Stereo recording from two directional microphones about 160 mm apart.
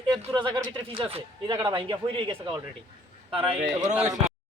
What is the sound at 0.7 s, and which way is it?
Speech, 35° right (ahead or behind).